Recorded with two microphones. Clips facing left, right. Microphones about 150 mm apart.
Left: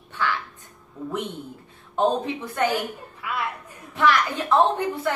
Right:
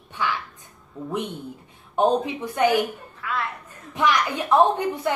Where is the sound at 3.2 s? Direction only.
10° left (ahead or behind).